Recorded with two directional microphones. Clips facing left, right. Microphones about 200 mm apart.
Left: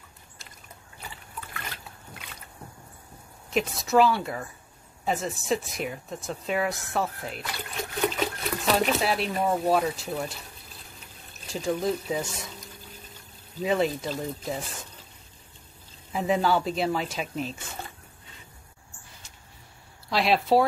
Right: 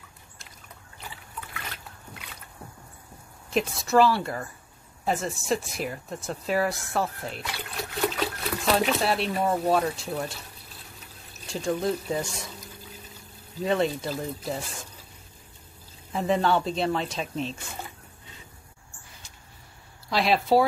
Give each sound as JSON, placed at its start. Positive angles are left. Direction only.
{"t": 3.4, "sound": "speech", "side_deg": 0}
{"t": 11.5, "sound": "speech", "side_deg": 0}
{"t": 16.1, "sound": "speech", "side_deg": 5}
{"t": 20.1, "sound": "speech", "side_deg": 0}